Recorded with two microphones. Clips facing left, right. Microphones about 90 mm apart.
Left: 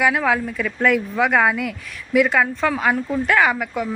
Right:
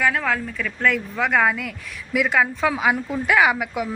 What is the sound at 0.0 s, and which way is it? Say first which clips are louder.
A woman's voice: left 3 dB; 10° left (ahead or behind).